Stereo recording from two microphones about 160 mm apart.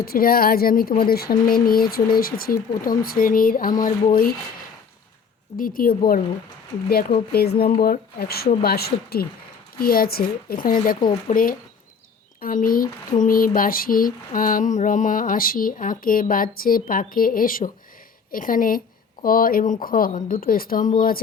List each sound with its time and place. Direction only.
0.0 s speech: 70° left (ahead or behind)
5.5 s speech: 60° left (ahead or behind)
7.3 s speech: 80° left
9.8 s speech: 65° left (ahead or behind)
11.3 s speech: 50° left (ahead or behind)
12.4 s speech: 60° left (ahead or behind)